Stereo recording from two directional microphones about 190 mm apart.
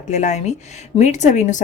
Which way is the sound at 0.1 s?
40° left (ahead or behind).